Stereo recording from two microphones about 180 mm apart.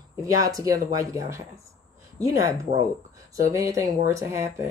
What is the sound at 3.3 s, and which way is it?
Speech, 15° right (ahead or behind).